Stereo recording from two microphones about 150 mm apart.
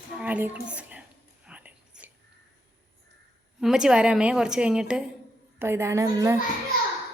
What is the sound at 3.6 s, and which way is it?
A woman's voice, 5° right (ahead or behind).